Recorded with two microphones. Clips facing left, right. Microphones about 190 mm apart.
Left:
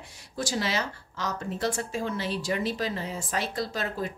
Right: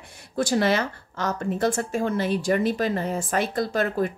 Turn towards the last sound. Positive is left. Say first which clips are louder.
# right 7 dB
turn(degrees=-55)  # may be behind; listen again after turning